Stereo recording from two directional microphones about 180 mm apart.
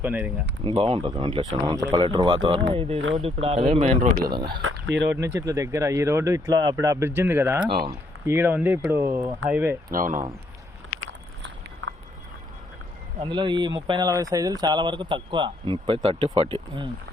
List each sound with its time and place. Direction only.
0.0 s speech: 10° right (ahead or behind)
0.6 s speech: 30° right (ahead or behind)
4.3 s speech: 25° right (ahead or behind)
5.0 s speech: 10° right (ahead or behind)
7.8 s speech: 25° right (ahead or behind)
8.4 s speech: 10° right (ahead or behind)
9.9 s speech: 50° right (ahead or behind)
11.8 s vehicle: 90° right
13.1 s speech: 25° right (ahead or behind)